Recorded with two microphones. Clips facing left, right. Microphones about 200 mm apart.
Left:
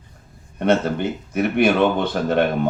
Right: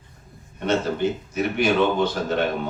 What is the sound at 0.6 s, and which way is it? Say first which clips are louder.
Speech: left 3 dB; 60° left (ahead or behind).